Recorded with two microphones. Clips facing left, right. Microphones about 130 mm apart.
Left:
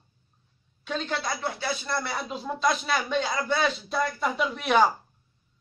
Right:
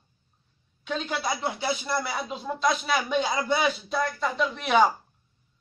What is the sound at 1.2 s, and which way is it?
Speech, 25° right (ahead or behind).